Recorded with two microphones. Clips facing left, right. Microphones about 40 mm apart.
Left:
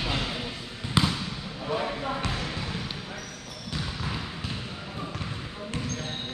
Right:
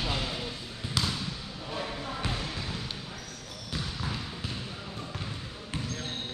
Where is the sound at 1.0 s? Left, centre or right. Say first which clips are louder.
Left 6 dB; left.